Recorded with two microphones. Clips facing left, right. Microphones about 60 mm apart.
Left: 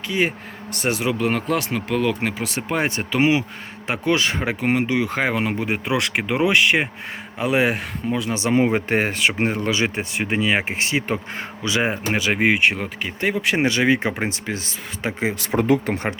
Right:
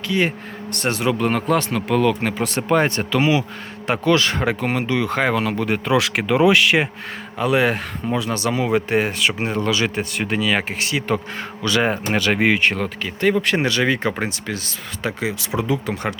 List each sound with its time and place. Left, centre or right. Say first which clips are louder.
0.1 s speech: right 1 dB; centre
3.2 s speech: even; left
3.8 s speech: right 3 dB; centre
5.9 s speech: right 5 dB; centre
7.3 s speech: right 2 dB; centre
8.5 s speech: left 1 dB; left